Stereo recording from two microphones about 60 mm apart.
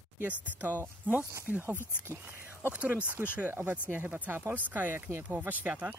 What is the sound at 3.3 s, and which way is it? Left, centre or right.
Speech, right.